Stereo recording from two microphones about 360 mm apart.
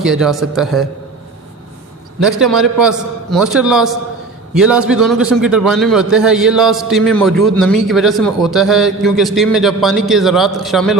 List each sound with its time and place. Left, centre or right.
0.0 s a man's voice: centre
2.2 s a man's voice: centre